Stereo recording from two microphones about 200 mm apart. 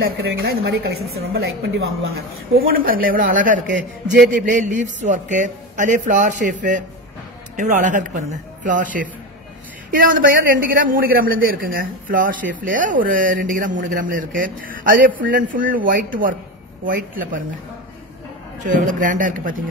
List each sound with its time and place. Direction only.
0.0 s a woman's voice: 55° right (ahead or behind)
18.6 s a man's voice: 40° right (ahead or behind)